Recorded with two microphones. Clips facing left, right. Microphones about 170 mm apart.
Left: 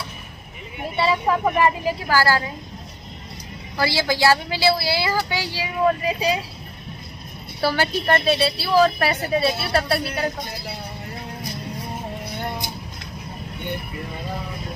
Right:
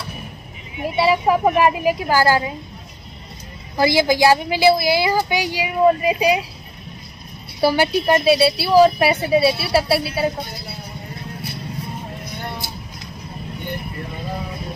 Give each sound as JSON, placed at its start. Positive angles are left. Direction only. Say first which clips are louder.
{"t": 0.8, "sound": "a woman's voice", "louder": "right 4 dB", "side_deg": -15}
{"t": 3.7, "sound": "a woman's voice", "louder": "right 6 dB", "side_deg": -15}
{"t": 7.6, "sound": "a woman's voice", "louder": "right 5 dB", "side_deg": -15}